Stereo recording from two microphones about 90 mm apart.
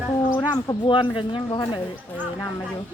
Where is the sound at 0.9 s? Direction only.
65° left (ahead or behind).